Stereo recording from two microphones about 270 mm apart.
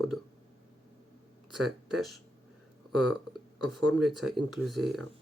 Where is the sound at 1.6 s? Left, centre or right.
Centre.